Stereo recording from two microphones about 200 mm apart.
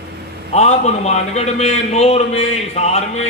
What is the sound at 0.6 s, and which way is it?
A man's voice, 35° left (ahead or behind).